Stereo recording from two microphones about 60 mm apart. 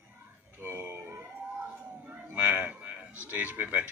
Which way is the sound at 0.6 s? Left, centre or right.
Right.